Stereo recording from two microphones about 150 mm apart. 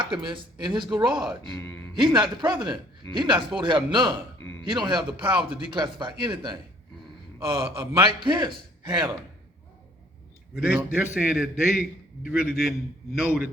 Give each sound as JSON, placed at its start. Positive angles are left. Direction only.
{"t": 0.0, "sound": "speech", "side_deg": -30}
{"t": 1.5, "sound": "speech", "side_deg": 15}
{"t": 1.9, "sound": "speech", "side_deg": -30}
{"t": 10.5, "sound": "a man's voice", "side_deg": -15}